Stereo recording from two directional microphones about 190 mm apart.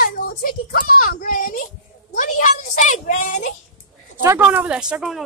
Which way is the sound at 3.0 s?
40° left (ahead or behind).